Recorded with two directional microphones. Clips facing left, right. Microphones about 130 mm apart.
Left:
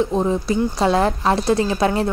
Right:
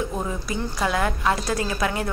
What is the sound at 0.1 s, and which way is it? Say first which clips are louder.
A woman's voice: left 9 dB; 25° left (ahead or behind).